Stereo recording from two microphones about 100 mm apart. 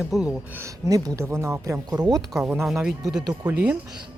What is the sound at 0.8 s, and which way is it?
Speech, 35° right (ahead or behind).